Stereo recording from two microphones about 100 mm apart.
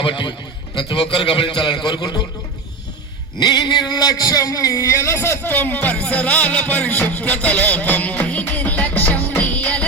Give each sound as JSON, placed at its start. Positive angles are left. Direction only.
{"t": 0.0, "sound": "a man's voice", "side_deg": 55}
{"t": 3.4, "sound": "speech", "side_deg": 45}